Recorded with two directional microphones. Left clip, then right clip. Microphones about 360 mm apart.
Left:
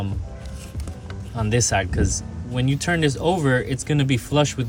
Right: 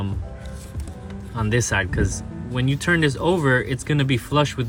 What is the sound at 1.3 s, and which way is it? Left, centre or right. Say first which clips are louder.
Speech: even; centre.